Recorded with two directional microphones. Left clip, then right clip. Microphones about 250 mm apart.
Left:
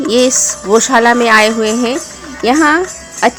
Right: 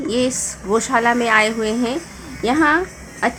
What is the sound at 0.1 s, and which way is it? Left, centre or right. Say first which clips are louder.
A woman's voice: left 10 dB; left.